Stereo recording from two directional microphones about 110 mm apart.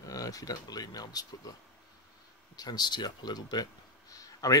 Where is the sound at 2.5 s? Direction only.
35° left (ahead or behind).